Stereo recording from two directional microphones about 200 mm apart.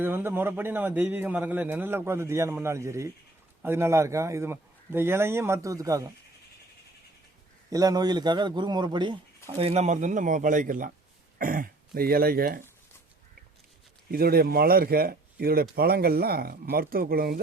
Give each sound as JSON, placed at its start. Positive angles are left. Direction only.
{"t": 0.0, "sound": "a man's voice", "side_deg": -10}
{"t": 7.7, "sound": "a man's voice", "side_deg": -20}
{"t": 9.6, "sound": "speech", "side_deg": -35}
{"t": 14.1, "sound": "speech", "side_deg": -50}